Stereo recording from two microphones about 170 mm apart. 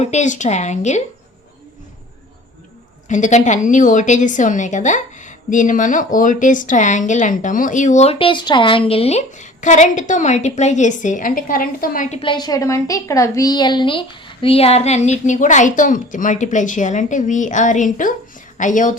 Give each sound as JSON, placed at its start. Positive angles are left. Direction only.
{"t": 0.0, "sound": "a woman's voice", "side_deg": 45}
{"t": 3.1, "sound": "a woman's voice", "side_deg": 45}
{"t": 12.2, "sound": "a woman's voice", "side_deg": 25}